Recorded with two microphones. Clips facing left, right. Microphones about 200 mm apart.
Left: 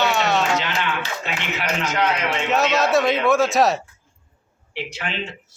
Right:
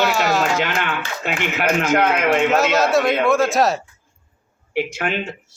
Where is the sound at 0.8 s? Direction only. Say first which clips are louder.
Right 1 dB; 50° right (ahead or behind).